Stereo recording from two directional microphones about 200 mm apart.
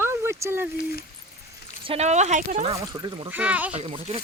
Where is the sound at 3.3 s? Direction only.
5° right (ahead or behind).